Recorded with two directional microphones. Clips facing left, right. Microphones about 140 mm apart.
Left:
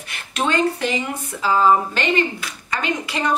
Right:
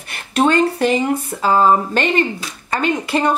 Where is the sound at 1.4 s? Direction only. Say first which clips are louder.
Right 2 dB; 45° right (ahead or behind).